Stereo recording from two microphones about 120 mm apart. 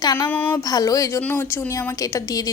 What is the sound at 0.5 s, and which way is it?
Speech, 30° left (ahead or behind).